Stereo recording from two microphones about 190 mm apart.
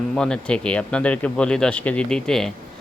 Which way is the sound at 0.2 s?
5° left (ahead or behind).